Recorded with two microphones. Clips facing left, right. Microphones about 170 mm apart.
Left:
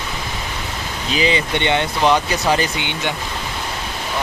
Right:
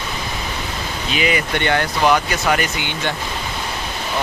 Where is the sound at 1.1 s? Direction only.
30° left (ahead or behind).